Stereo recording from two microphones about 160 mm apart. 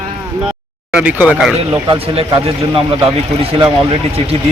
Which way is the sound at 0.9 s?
10° right (ahead or behind).